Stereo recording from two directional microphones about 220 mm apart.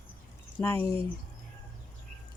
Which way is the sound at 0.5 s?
10° left (ahead or behind).